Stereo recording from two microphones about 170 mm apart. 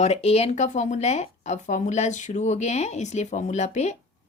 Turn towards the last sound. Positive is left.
turn(degrees=40)  # may be behind; listen again after turning